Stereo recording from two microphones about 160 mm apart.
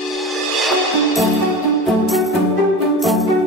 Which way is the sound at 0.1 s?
Centre (ahead or behind).